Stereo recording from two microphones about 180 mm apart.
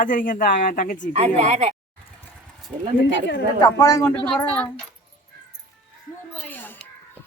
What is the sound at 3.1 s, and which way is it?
Speech, 75° left (ahead or behind).